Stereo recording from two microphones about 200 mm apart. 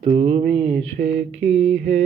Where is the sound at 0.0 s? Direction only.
30° right (ahead or behind).